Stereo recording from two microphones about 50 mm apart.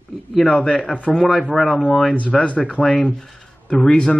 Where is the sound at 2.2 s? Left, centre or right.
Left.